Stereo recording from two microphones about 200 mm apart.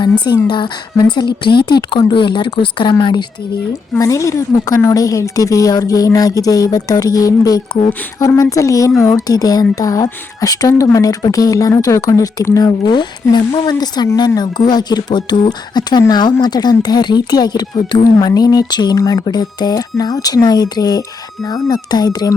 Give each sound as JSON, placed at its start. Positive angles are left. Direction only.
{"t": 0.0, "sound": "a woman's voice", "side_deg": 20}